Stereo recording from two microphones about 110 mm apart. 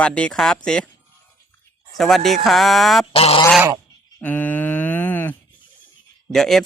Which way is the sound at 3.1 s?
60° left (ahead or behind).